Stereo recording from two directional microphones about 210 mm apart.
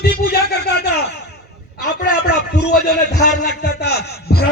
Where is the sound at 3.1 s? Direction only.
50° left (ahead or behind).